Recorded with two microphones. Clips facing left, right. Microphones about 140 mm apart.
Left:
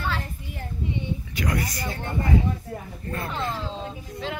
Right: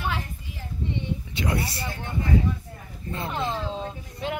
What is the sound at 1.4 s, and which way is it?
Speech, 25° right (ahead or behind).